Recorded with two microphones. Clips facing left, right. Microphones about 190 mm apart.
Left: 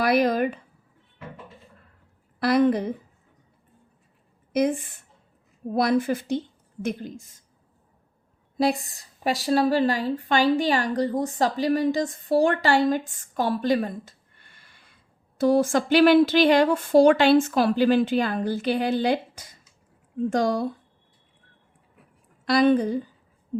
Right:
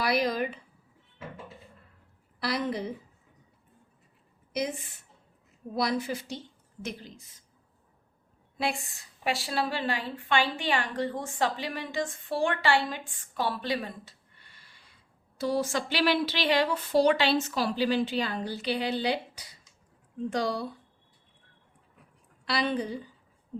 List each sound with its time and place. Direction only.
0.0 s a woman's voice: 55° left (ahead or behind)
2.4 s speech: 55° left (ahead or behind)
4.5 s a woman's voice: 55° left (ahead or behind)
8.5 s a woman's voice: 40° left (ahead or behind)
22.4 s speech: 50° left (ahead or behind)